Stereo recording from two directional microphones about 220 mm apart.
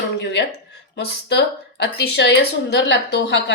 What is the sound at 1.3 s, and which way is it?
A woman's voice, 50° left (ahead or behind).